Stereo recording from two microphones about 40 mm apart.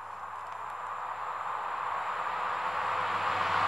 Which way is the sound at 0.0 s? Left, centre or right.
Centre.